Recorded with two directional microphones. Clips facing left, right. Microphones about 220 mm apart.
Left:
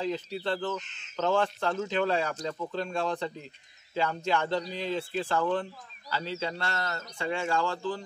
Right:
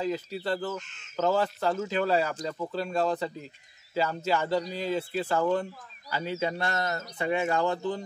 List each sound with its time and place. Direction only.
0.0 s speech: 5° right (ahead or behind); by 8.0 s 20° right (ahead or behind)